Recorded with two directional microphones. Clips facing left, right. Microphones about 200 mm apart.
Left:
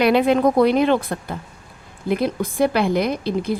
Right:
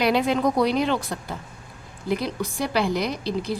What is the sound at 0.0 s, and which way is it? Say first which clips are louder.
A woman's voice: left 5 dB; 55° left (ahead or behind).